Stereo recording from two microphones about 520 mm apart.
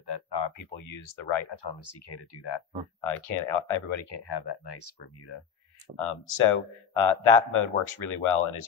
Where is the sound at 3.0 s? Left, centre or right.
Left.